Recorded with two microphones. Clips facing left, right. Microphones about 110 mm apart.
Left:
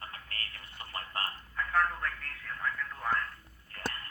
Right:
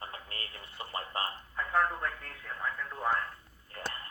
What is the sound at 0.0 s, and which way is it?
Telephone, 25° right (ahead or behind).